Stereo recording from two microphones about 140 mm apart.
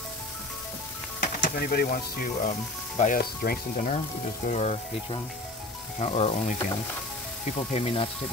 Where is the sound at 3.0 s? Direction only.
80° left.